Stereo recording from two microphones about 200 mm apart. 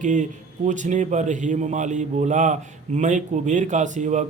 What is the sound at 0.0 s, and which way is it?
A man's voice, 40° right (ahead or behind).